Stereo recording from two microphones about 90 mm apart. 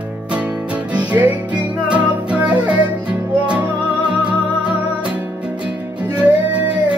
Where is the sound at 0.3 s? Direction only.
15° right (ahead or behind).